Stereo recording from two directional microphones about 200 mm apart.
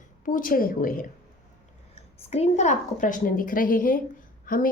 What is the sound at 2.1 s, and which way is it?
A woman's voice, 30° left (ahead or behind).